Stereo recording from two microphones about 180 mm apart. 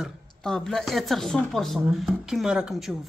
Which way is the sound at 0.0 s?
5° left (ahead or behind).